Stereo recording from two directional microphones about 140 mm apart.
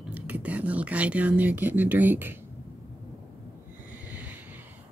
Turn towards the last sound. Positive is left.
turn(degrees=-10)  # may be behind; listen again after turning